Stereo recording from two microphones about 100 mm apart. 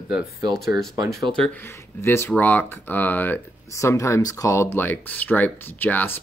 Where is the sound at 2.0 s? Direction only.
25° left (ahead or behind).